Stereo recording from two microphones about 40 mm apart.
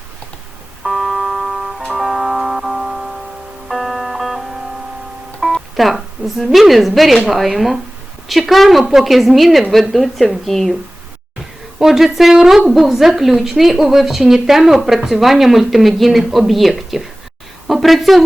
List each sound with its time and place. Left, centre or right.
0.9 s music: centre
3.7 s music: centre
5.5 s a woman's voice: centre
11.8 s a woman's voice: centre
17.7 s a sound: centre